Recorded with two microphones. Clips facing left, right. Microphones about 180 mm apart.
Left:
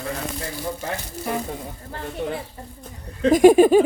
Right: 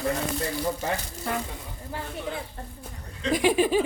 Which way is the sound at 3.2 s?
45° left (ahead or behind).